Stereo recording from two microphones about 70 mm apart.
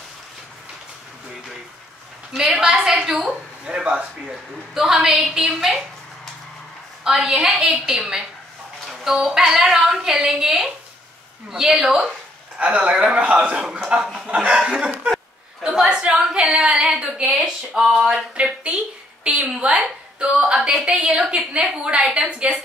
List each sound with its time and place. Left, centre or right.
2.3 s a woman's voice: centre
7.2 s a woman's voice: centre
12.5 s a woman's voice: centre